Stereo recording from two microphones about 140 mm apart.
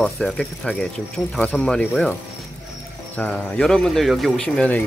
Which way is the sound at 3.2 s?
5° left (ahead or behind).